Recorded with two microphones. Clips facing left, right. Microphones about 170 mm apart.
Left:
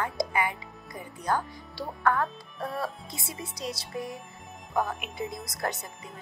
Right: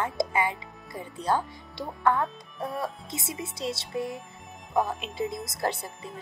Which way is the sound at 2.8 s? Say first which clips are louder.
Right 1 dB; 20° right (ahead or behind).